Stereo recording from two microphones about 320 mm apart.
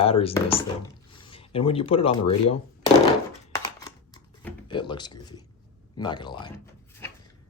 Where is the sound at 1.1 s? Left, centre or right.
Centre.